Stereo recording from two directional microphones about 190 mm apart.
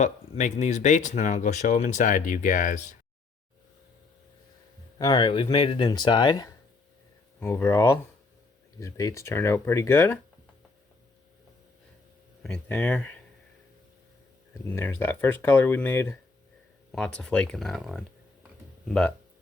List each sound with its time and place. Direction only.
0.0 s speech: 40° left (ahead or behind)
4.9 s speech: 20° left (ahead or behind)
12.4 s speech: 5° left (ahead or behind)
14.7 s speech: 10° left (ahead or behind)